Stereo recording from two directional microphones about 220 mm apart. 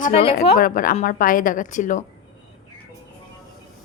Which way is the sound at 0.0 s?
25° left (ahead or behind).